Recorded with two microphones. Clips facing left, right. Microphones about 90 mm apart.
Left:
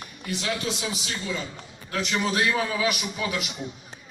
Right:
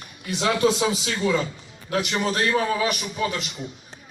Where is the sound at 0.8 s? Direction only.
85° right.